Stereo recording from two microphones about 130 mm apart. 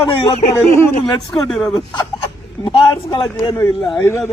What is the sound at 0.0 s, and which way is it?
Speech, 40° left (ahead or behind).